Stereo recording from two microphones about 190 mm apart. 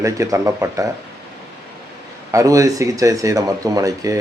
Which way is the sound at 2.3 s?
15° right (ahead or behind).